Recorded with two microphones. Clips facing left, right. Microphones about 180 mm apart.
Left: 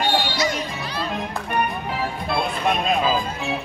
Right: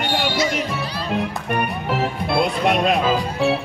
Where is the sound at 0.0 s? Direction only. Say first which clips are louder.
Even; 65° right (ahead or behind).